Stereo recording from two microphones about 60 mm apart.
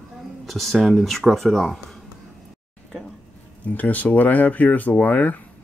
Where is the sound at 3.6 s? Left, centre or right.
Left.